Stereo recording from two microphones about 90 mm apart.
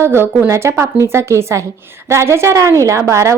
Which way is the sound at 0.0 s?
25° right (ahead or behind).